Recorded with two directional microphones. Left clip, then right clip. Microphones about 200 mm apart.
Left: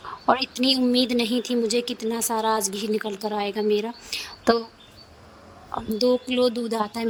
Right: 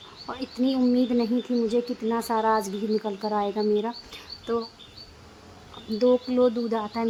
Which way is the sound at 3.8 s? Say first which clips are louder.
Left 2 dB; 45° left (ahead or behind).